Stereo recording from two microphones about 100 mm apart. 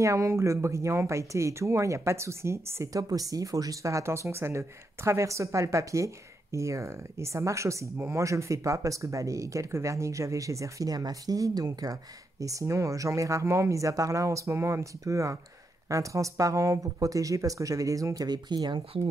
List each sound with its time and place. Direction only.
0.0 s speech: 30° right (ahead or behind); by 19.0 s 50° right (ahead or behind)